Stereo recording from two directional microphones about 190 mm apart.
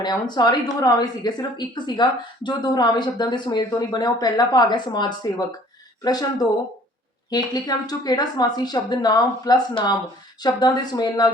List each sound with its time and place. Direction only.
0.0 s speech: 20° left (ahead or behind)
7.3 s speech: 20° left (ahead or behind)